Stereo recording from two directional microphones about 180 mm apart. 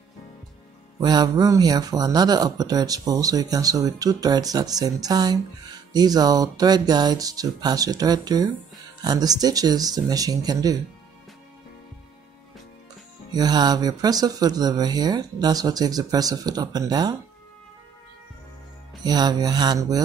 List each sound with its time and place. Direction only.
1.0 s speech: 20° right (ahead or behind)
13.3 s speech: 20° right (ahead or behind)
19.0 s speech: 20° right (ahead or behind)